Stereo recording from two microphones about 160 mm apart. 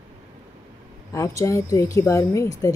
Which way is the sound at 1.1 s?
20° left (ahead or behind).